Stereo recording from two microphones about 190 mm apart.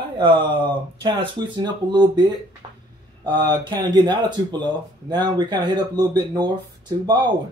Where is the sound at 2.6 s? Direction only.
25° right (ahead or behind).